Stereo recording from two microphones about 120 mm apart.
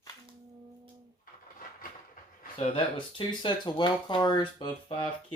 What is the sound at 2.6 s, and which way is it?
Speech, 45° left (ahead or behind).